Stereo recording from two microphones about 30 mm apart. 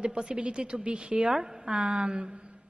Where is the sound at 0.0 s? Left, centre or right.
Right.